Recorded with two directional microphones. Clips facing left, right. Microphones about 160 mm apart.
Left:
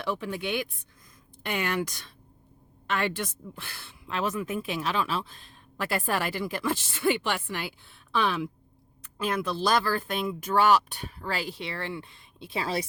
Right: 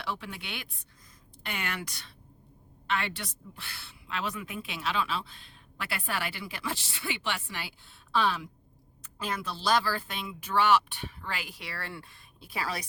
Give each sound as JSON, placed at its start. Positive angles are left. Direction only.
{"t": 0.2, "sound": "a woman's voice", "side_deg": 45}